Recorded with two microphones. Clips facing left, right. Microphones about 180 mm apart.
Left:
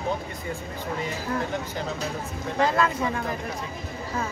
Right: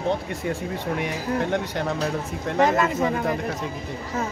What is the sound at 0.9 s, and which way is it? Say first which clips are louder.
Speech: right 2 dB; 70° right (ahead or behind).